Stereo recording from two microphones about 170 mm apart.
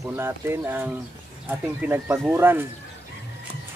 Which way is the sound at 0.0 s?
15° right (ahead or behind).